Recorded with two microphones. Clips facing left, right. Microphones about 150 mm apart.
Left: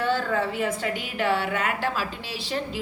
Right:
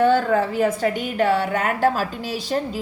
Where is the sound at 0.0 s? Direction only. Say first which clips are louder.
Right 7 dB; 45° right (ahead or behind).